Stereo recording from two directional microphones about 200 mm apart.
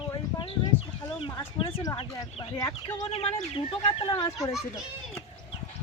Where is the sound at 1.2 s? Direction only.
20° left (ahead or behind).